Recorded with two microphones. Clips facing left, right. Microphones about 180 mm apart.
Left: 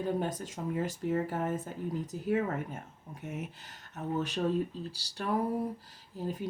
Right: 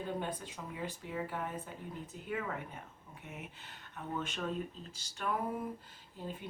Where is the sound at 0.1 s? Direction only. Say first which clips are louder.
Left 6 dB; 40° left (ahead or behind).